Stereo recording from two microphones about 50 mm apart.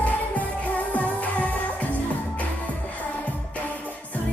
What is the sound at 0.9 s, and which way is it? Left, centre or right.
Music of asia, left.